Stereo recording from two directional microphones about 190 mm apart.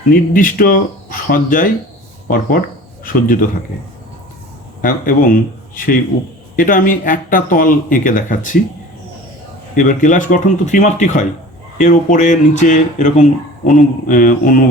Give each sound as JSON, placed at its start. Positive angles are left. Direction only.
{"t": 0.1, "sound": "speech", "side_deg": 50}
{"t": 4.8, "sound": "speech", "side_deg": 50}
{"t": 9.7, "sound": "speech", "side_deg": 40}